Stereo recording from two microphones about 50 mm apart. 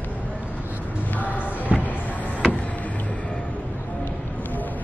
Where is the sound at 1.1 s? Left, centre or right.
Left.